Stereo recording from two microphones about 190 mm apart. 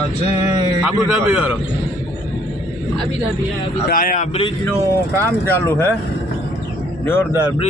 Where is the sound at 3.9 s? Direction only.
50° left (ahead or behind).